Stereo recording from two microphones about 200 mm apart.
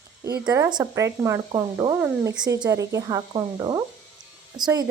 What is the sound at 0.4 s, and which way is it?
Speech, 15° right (ahead or behind).